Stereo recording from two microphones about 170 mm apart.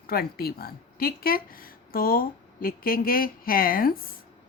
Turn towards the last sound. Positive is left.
turn(degrees=60)  # may be behind; listen again after turning